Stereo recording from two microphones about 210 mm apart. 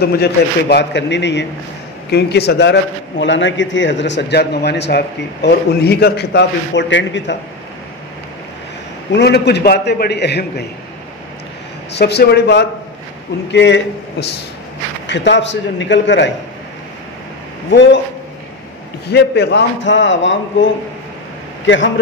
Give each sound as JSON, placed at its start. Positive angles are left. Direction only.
{"t": 0.0, "sound": "a man's voice", "side_deg": 50}
{"t": 9.1, "sound": "a man's voice", "side_deg": 55}
{"t": 12.0, "sound": "a man's voice", "side_deg": 50}
{"t": 15.0, "sound": "a man's voice", "side_deg": 55}
{"t": 17.6, "sound": "a man's voice", "side_deg": 55}
{"t": 19.0, "sound": "a man's voice", "side_deg": 50}